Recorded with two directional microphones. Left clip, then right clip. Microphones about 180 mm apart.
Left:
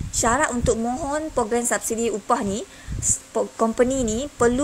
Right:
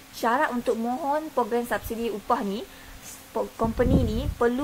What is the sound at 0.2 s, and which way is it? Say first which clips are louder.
A woman's voice: left 3 dB; 15° left (ahead or behind).